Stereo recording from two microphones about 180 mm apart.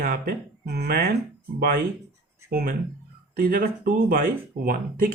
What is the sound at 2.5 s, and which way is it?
Speech, 55° right (ahead or behind).